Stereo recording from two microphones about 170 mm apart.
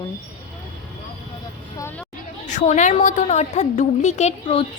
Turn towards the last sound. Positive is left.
turn(degrees=35)  # may be behind; listen again after turning